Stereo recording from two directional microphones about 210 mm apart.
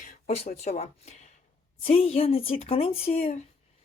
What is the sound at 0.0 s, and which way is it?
Speech, 35° left (ahead or behind).